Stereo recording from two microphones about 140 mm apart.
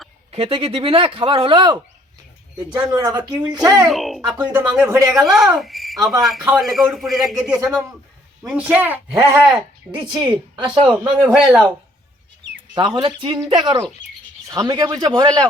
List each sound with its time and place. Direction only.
0.3 s a woman's voice: 45° right (ahead or behind)
3.8 s speech: centre (ahead or behind)
4.2 s speech: 30° right (ahead or behind)
4.7 s a woman's voice: 20° right (ahead or behind)
5.1 s speech: 5° right (ahead or behind)
10.2 s speech: 30° right (ahead or behind)
11.3 s speech: centre (ahead or behind)
12.7 s a woman's voice: 35° right (ahead or behind)